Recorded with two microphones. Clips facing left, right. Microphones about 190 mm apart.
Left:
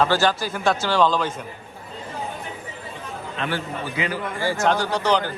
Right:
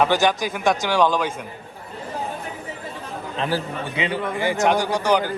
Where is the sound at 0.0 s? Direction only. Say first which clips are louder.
Right 1 dB; 15° right (ahead or behind).